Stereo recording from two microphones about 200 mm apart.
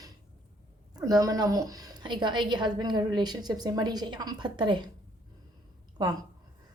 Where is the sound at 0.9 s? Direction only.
20° right (ahead or behind).